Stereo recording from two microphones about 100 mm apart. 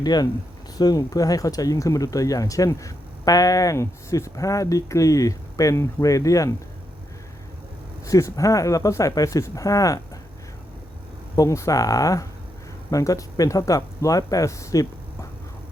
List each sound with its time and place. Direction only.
0.0 s speech: 45° left (ahead or behind)
8.0 s speech: 35° left (ahead or behind)
11.3 s speech: 30° left (ahead or behind)